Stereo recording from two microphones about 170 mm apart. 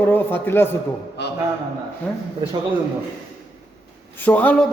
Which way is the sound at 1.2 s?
85° left.